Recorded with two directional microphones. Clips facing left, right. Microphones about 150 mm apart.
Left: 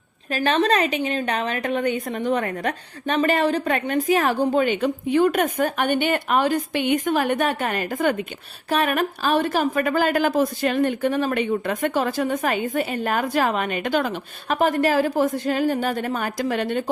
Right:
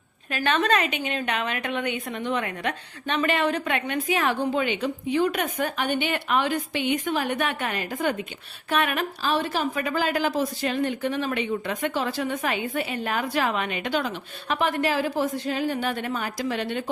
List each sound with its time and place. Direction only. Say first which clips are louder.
0.3 s a woman's voice: left 3 dB; 35° left (ahead or behind); by 8.1 s 50° left (ahead or behind)
8.7 s a woman's voice: left 4 dB; 40° left (ahead or behind)